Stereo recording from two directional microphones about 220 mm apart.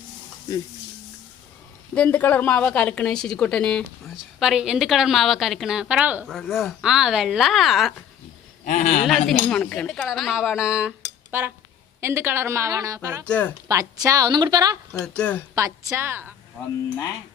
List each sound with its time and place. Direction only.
2.0 s a woman's voice: 5° left (ahead or behind)
8.6 s speech: 30° left (ahead or behind)
9.0 s a woman's voice: centre (ahead or behind)
13.2 s a woman's voice: 5° left (ahead or behind)
13.7 s a woman's voice: 15° right (ahead or behind)
15.0 s a woman's voice: 5° left (ahead or behind)
15.5 s a woman's voice: 15° right (ahead or behind)
16.6 s a woman's voice: 5° left (ahead or behind)